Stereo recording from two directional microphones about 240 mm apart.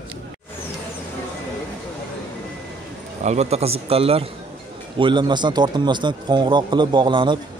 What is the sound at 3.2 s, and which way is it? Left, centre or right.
Speech, right.